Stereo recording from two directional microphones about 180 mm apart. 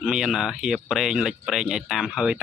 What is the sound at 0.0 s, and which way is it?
Speech, 5° right (ahead or behind).